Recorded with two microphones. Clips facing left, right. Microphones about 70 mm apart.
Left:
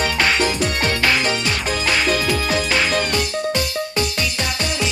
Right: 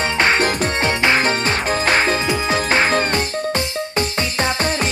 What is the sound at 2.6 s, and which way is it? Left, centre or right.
Music, right.